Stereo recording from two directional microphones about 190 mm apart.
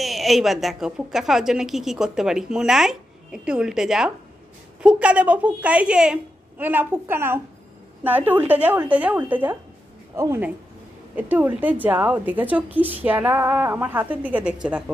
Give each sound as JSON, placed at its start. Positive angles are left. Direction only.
{"t": 0.0, "sound": "a woman's voice", "side_deg": 0}